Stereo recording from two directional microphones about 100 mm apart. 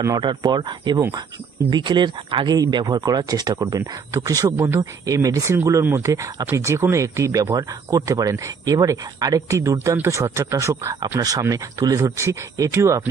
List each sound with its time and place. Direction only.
0.2 s speech: 50° right (ahead or behind)
4.6 s speech: 25° right (ahead or behind)
5.0 s speech: 35° right (ahead or behind)